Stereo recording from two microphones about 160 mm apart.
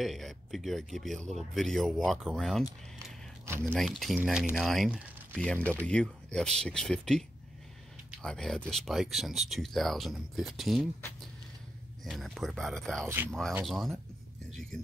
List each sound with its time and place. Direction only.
0.0 s speech: centre (ahead or behind)
3.4 s speech: 15° right (ahead or behind)
3.7 s speech: centre (ahead or behind)
12.0 s speech: centre (ahead or behind)